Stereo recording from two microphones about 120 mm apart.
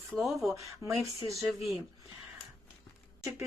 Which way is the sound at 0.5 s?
25° right (ahead or behind).